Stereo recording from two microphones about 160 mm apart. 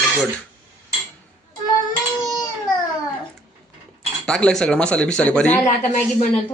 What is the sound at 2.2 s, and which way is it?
Baby cry, 20° left (ahead or behind).